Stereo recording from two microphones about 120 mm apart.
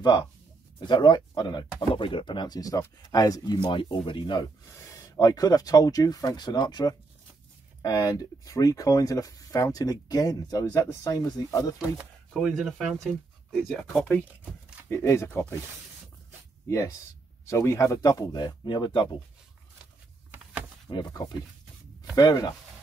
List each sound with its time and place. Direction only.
0.0 s speech: 35° left (ahead or behind)
1.8 s speech: 45° left (ahead or behind)
3.5 s speech: 45° left (ahead or behind)
4.6 s speech: 30° left (ahead or behind)
12.4 s speech: centre (ahead or behind)
14.2 s a sound: 10° right (ahead or behind)
14.9 s speech: 25° left (ahead or behind)
16.6 s speech: 25° left (ahead or behind)
20.9 s speech: 35° left (ahead or behind)